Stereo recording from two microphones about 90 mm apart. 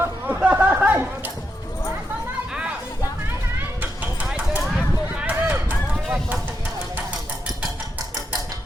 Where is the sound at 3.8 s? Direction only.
20° right (ahead or behind).